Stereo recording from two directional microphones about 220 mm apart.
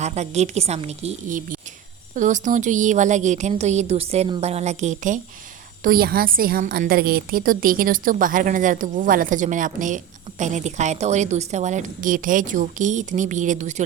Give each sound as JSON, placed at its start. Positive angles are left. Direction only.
{"t": 0.0, "sound": "a woman's voice", "side_deg": -30}